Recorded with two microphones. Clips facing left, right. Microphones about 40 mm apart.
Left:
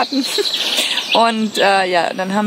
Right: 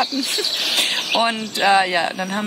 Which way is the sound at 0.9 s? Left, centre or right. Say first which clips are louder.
Left 9 dB; left.